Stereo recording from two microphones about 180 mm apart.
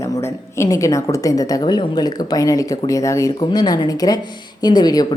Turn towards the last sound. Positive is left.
turn(degrees=20)  # may be behind; listen again after turning